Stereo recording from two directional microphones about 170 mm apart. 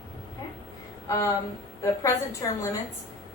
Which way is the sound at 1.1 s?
20° left (ahead or behind).